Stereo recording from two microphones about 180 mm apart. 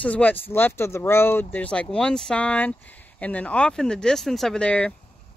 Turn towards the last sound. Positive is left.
turn(degrees=5)  # may be behind; listen again after turning